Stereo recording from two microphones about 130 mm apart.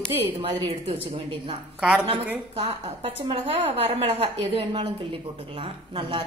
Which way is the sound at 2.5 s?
45° right (ahead or behind).